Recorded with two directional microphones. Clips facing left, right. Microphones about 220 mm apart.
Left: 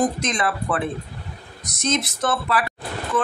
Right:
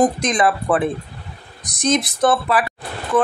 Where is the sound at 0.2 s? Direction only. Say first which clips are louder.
Right 6 dB; 15° right (ahead or behind).